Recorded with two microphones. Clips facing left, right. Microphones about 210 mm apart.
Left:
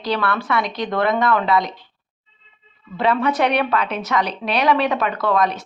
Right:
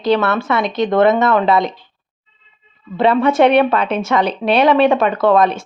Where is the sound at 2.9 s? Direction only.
25° right (ahead or behind).